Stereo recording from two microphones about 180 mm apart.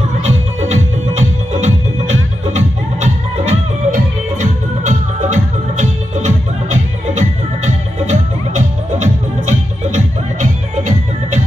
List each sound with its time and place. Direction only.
0.7 s music: 40° right (ahead or behind)